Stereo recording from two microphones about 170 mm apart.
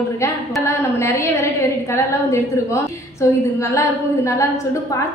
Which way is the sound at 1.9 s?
15° left (ahead or behind).